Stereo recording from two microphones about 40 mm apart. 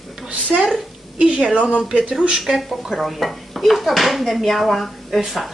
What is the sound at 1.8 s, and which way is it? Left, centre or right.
Speech, centre.